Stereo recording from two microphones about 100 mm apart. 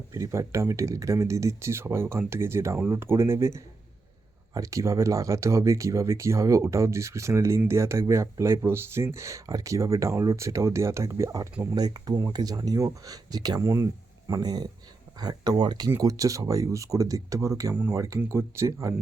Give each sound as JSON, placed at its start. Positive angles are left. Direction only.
{"t": 0.1, "sound": "speech", "side_deg": -30}
{"t": 11.7, "sound": "speech", "side_deg": -45}
{"t": 13.6, "sound": "speech", "side_deg": -30}
{"t": 14.3, "sound": "speech", "side_deg": -40}